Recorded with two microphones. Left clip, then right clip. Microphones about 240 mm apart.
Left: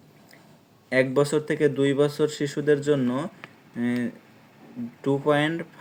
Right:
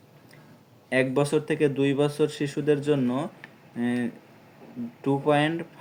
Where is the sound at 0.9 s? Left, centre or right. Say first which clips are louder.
Left 2 dB; left.